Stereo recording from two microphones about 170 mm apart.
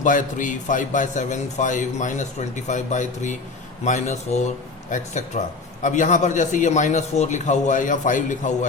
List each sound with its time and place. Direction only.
0.0 s a man's voice: 50° left (ahead or behind)